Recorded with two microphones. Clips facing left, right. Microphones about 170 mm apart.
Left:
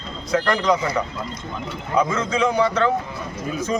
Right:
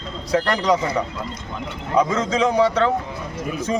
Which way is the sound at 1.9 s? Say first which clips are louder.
Right 2 dB; 40° right (ahead or behind).